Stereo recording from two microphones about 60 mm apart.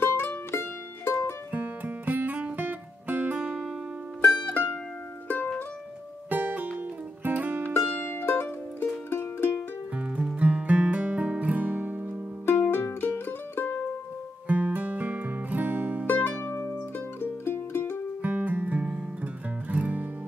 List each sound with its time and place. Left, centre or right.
0.0 s music: left
1.5 s music: right
4.3 s music: left
6.3 s music: right
8.2 s music: left
9.9 s music: right
12.4 s music: left
14.5 s music: right
16.1 s music: left
18.2 s music: right